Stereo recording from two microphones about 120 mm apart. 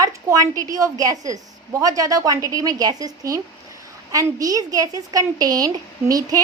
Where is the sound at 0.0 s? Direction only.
30° right (ahead or behind).